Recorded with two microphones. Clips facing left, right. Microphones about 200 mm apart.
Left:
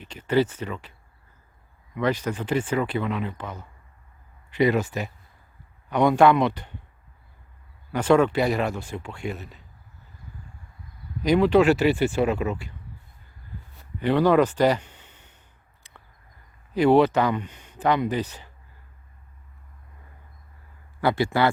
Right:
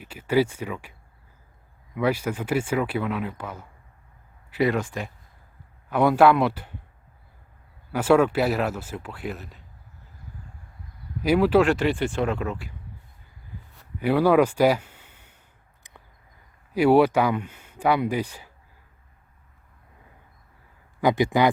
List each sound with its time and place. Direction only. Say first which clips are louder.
0.0 s speech: even; 10° right (ahead or behind)
2.0 s speech: right 1 dB; 10° right (ahead or behind)
7.9 s speech: even; 5° right (ahead or behind)
11.2 s speech: left 1 dB; 5° right (ahead or behind)
11.7 s speech: left 3 dB; 5° left (ahead or behind)
13.7 s speech: even; 10° right (ahead or behind)
16.7 s speech: even; 10° right (ahead or behind)
21.0 s speech: right 2 dB; 15° right (ahead or behind)